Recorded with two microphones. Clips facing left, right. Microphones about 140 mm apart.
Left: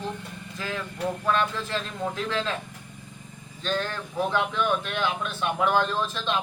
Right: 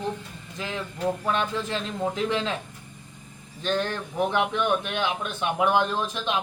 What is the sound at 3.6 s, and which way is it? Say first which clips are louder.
A man's voice: right 2 dB; 20° right (ahead or behind).